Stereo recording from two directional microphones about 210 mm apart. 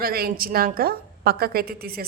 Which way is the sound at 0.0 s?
45° right (ahead or behind).